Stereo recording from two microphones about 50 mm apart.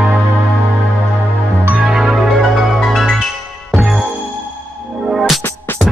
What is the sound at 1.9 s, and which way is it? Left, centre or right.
Music, centre.